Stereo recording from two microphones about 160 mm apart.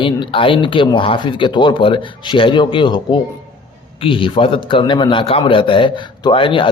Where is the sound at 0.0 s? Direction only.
30° left (ahead or behind).